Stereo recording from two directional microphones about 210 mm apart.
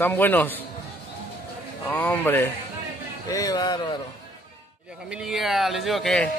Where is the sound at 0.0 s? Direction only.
10° left (ahead or behind).